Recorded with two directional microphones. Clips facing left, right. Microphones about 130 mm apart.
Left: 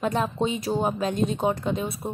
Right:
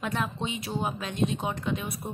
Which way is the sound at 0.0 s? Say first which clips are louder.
Left 6 dB; 35° left (ahead or behind).